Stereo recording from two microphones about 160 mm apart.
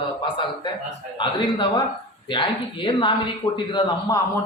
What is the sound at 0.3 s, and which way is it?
A man's voice, 30° left (ahead or behind).